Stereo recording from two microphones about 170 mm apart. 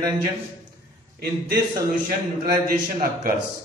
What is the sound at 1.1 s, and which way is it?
A man's voice, 65° right (ahead or behind).